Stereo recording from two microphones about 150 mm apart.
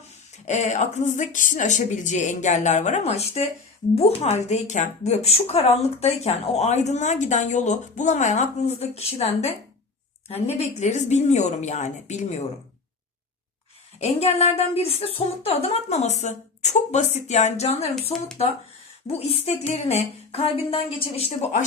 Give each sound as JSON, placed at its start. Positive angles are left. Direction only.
{"t": 0.4, "sound": "a woman's voice", "side_deg": 50}
{"t": 14.0, "sound": "a woman's voice", "side_deg": 45}